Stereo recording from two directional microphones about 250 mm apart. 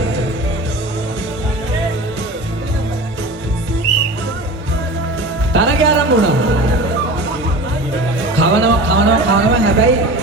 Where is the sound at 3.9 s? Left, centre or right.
Right.